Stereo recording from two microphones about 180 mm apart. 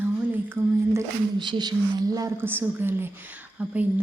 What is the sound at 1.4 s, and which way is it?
A woman's voice, 25° right (ahead or behind).